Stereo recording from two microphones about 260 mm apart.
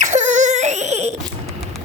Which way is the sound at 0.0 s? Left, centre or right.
Right.